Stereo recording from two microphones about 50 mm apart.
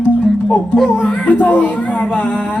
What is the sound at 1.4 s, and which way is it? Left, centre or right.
Speech, left.